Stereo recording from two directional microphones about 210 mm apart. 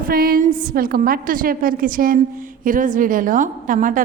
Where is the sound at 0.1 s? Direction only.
45° right (ahead or behind).